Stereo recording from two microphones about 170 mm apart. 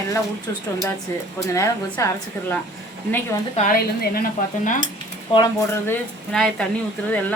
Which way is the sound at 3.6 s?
55° left (ahead or behind).